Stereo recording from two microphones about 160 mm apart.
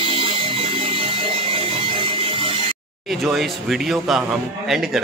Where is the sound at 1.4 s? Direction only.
35° right (ahead or behind).